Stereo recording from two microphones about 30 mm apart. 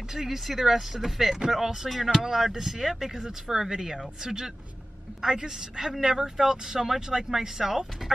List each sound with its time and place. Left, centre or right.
0.1 s speech: centre